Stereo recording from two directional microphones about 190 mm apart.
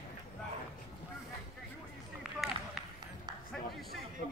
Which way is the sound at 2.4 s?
Centre (ahead or behind).